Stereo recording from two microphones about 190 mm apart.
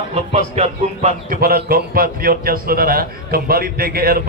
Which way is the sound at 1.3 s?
50° right (ahead or behind).